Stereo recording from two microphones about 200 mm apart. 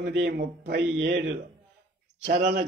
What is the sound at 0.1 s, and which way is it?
A man's voice, 55° right (ahead or behind).